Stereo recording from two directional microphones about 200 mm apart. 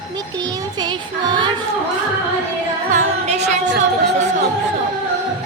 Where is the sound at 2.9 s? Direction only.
35° right (ahead or behind).